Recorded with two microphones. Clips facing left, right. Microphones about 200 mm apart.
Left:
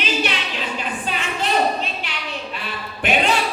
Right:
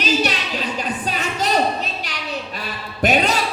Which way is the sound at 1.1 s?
40° right (ahead or behind).